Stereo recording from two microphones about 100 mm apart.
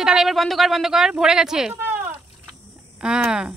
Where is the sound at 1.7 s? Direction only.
20° right (ahead or behind).